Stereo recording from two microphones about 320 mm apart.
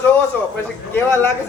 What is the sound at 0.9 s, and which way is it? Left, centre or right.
Speech, centre.